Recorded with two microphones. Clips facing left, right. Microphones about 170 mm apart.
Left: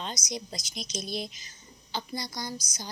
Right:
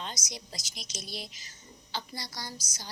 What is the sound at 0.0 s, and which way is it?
A woman's voice, 20° left (ahead or behind).